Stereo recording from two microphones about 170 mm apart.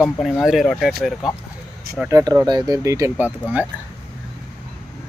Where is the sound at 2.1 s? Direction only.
15° right (ahead or behind).